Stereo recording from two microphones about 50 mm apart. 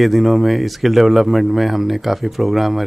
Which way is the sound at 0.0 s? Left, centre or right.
Centre.